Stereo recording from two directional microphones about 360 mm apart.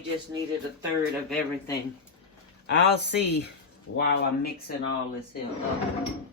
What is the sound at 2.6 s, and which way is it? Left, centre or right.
Speech, left.